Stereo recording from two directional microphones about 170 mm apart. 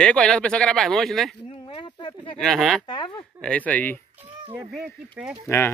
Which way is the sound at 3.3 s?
5° left (ahead or behind).